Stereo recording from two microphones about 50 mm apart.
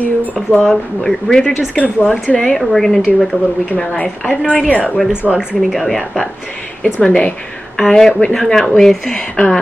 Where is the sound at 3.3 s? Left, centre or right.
Left.